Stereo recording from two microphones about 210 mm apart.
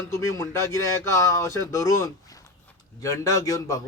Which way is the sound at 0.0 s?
15° left (ahead or behind).